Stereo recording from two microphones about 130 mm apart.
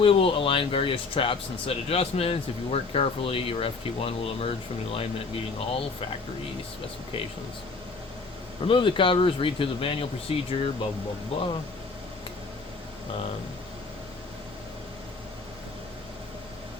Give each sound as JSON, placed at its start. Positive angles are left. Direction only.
{"t": 0.0, "sound": "speech", "side_deg": 45}
{"t": 8.6, "sound": "speech", "side_deg": 40}